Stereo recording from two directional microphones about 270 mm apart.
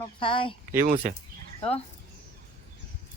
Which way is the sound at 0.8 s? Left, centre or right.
Right.